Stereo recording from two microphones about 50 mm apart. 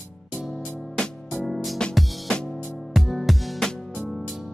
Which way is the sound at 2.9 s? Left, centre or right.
Centre.